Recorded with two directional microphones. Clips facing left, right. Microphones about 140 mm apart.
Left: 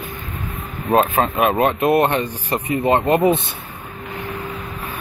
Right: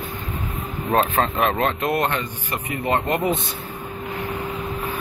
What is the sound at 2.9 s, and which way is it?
Speech, 20° left (ahead or behind).